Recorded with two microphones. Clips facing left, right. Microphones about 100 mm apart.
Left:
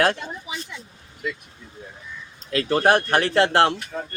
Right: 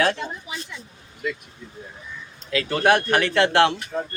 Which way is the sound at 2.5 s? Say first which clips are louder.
Left 1 dB; 40° left (ahead or behind).